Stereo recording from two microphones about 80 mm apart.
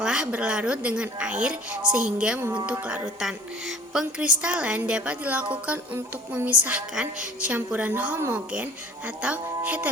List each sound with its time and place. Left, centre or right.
0.0 s music: centre
9.2 s speech: centre